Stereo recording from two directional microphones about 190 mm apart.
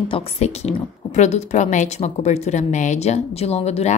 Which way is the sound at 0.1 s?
35° left (ahead or behind).